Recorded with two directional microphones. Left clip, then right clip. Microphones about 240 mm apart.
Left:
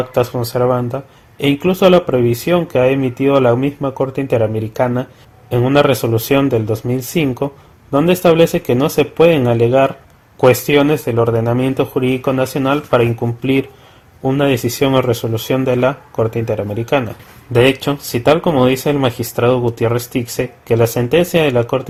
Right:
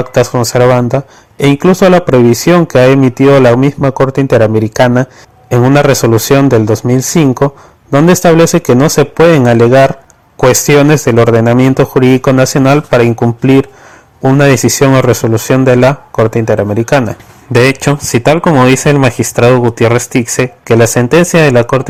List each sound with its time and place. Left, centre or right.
0.1 s a man's voice: right